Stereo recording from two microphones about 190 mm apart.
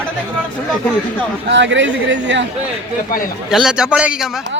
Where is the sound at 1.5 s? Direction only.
70° right (ahead or behind).